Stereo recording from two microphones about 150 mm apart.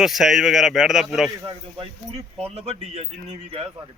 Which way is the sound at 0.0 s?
Centre (ahead or behind).